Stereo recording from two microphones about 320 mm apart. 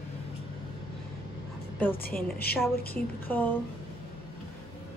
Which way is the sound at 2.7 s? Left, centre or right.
Left.